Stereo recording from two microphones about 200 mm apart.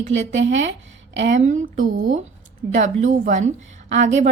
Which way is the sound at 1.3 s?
35° right (ahead or behind).